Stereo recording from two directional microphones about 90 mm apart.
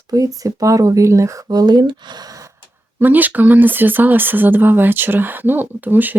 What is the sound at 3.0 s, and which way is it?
Speech, 20° right (ahead or behind).